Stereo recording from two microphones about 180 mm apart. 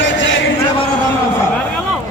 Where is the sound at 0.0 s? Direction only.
90° left.